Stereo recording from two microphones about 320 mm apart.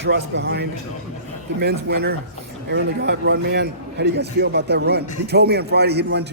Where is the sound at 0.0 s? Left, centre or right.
Right.